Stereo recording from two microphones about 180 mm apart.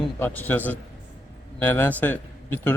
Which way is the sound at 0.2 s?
10° left (ahead or behind).